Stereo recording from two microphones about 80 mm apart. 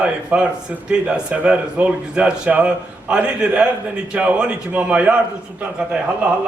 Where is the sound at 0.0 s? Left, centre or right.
Centre.